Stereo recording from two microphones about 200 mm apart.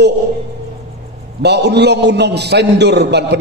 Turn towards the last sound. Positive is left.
turn(degrees=-55)  # may be behind; listen again after turning